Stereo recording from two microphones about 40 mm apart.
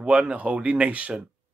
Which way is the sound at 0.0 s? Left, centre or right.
Right.